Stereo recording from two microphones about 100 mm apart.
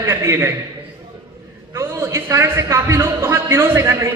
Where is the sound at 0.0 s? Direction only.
25° right (ahead or behind).